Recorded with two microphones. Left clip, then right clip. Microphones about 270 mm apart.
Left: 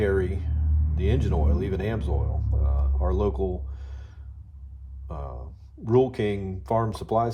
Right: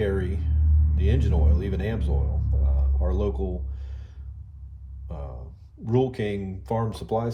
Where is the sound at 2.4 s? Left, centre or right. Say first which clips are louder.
Left 1 dB; left.